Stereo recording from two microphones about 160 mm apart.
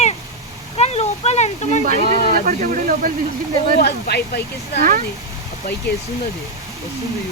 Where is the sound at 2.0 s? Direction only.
60° left (ahead or behind).